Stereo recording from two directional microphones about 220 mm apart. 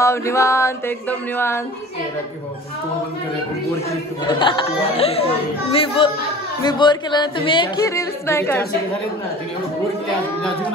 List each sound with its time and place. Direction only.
0.0 s mantra: 15° left (ahead or behind)
4.3 s speech: 20° left (ahead or behind)